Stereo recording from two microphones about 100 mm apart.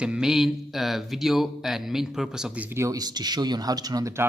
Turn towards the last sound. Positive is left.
turn(degrees=-40)  # may be behind; listen again after turning